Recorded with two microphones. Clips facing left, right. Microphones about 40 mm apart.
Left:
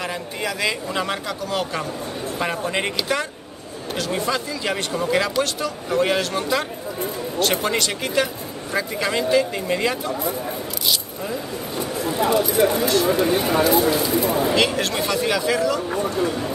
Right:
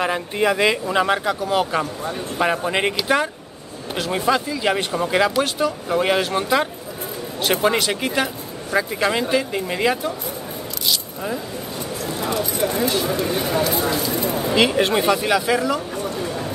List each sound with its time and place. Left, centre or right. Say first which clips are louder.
0.0 s a man's voice: right 7 dB; right
0.8 s speech: right 6 dB; centre
3.9 s speech: right 3 dB; centre
12.3 s speech: left 5 dB; centre
12.7 s speech: left 2 dB; centre
13.1 s speech: left 3 dB; centre
13.7 s speech: left 3 dB; centre
14.5 s speech: right 6 dB; centre
14.8 s a man's voice: right 5 dB; right
15.1 s speech: right 1 dB; centre